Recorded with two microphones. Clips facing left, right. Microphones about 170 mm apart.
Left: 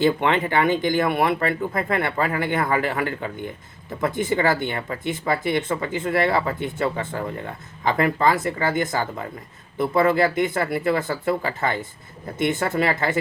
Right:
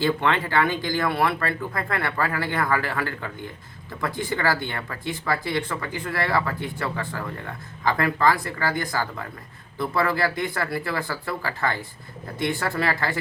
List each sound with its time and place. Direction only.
0.0 s speech: 20° left (ahead or behind)